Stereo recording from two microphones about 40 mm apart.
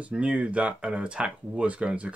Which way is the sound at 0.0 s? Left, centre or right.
Right.